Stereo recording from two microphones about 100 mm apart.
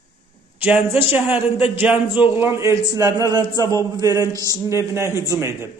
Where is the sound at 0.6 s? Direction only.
15° right (ahead or behind).